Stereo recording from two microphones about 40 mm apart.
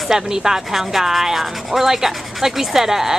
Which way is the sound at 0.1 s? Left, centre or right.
Centre.